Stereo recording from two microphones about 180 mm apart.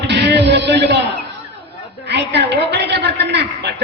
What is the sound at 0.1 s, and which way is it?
Speech, 70° right (ahead or behind).